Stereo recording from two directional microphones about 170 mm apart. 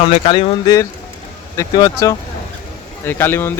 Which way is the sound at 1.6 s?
20° left (ahead or behind).